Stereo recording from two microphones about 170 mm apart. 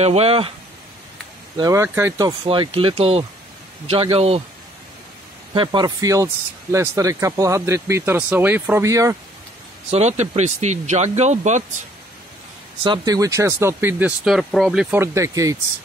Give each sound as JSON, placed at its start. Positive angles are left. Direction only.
{"t": 0.0, "sound": "speech", "side_deg": -40}
{"t": 1.6, "sound": "speech", "side_deg": -15}
{"t": 2.4, "sound": "speech", "side_deg": -30}
{"t": 5.5, "sound": "speech", "side_deg": -25}
{"t": 9.8, "sound": "speech", "side_deg": -40}
{"t": 12.8, "sound": "speech", "side_deg": -25}
{"t": 15.0, "sound": "speech", "side_deg": -15}